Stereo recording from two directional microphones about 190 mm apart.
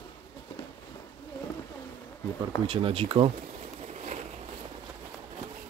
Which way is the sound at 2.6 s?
30° right (ahead or behind).